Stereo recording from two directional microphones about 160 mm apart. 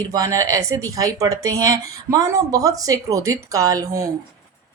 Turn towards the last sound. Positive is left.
turn(degrees=-20)  # may be behind; listen again after turning